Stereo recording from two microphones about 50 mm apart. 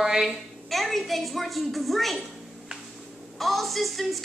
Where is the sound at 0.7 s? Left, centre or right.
Centre.